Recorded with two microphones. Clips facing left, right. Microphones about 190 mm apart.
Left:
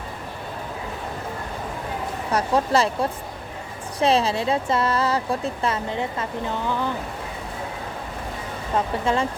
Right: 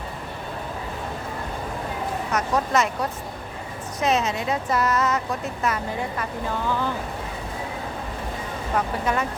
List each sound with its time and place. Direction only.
2.3 s speech: 30° left (ahead or behind)
8.7 s speech: 25° left (ahead or behind)